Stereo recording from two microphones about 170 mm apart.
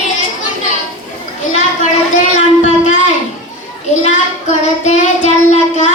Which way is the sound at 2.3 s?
45° left (ahead or behind).